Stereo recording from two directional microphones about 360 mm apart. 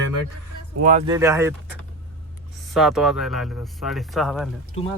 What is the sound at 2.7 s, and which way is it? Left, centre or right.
Speech, centre.